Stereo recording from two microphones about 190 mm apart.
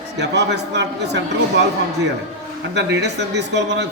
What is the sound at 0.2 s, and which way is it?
Speech, 65° right (ahead or behind).